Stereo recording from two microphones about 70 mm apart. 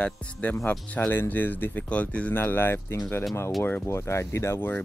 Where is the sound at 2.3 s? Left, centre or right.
Left.